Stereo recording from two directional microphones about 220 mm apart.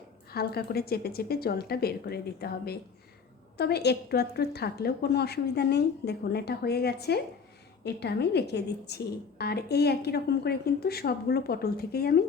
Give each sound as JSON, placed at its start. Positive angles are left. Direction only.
{"t": 0.3, "sound": "a woman's voice", "side_deg": 45}